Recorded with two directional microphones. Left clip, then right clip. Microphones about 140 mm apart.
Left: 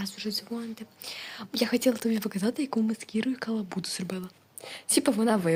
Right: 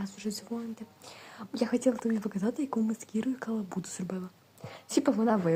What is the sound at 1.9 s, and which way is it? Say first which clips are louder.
Speech: left 2 dB; 45° left (ahead or behind).